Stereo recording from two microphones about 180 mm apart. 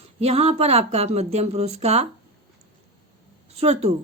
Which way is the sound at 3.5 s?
35° right (ahead or behind).